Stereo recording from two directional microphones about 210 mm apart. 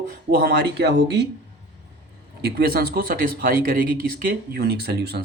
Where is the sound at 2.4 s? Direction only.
50° right (ahead or behind).